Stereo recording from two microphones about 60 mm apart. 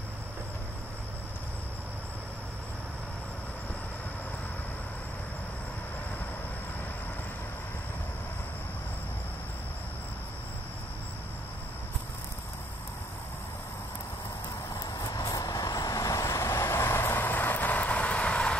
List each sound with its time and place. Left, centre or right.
14.8 s vehicle: left